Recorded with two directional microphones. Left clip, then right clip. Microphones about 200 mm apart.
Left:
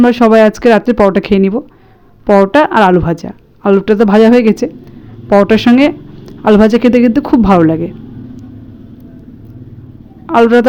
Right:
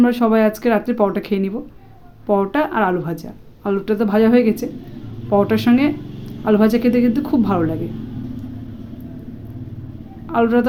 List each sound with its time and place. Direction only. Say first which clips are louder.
0.0 s speech: left 9 dB; 30° left (ahead or behind)
10.2 s a man's voice: left 9 dB; 35° left (ahead or behind)